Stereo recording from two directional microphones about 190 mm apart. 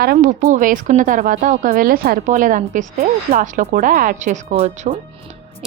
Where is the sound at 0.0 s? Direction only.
55° right (ahead or behind).